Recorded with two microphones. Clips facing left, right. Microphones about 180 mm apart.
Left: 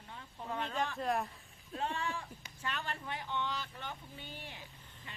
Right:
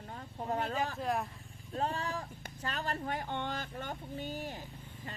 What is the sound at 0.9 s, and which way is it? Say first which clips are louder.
Speech: even; centre (ahead or behind).